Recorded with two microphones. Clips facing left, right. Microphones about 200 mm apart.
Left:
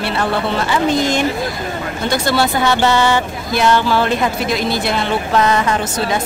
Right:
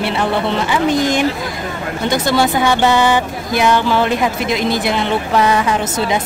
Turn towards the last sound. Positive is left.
turn(degrees=-10)  # may be behind; listen again after turning